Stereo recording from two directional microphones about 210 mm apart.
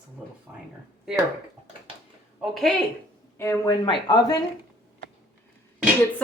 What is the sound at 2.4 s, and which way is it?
Speech, centre (ahead or behind).